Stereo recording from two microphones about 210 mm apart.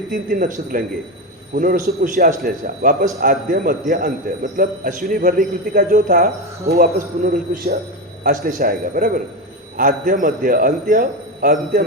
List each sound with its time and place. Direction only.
0.1 s a man's voice: 40° right (ahead or behind)